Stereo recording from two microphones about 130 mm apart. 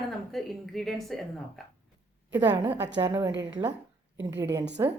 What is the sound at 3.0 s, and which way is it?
A woman's voice, 25° right (ahead or behind).